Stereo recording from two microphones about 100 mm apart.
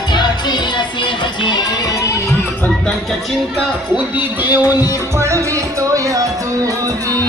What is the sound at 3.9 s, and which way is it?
Speech, 20° right (ahead or behind).